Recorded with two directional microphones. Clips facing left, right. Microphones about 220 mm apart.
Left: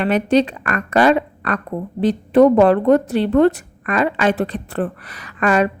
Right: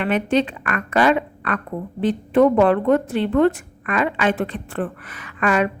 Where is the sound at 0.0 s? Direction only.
40° left (ahead or behind).